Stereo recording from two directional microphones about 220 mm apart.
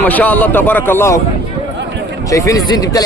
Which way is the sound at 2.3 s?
15° left (ahead or behind).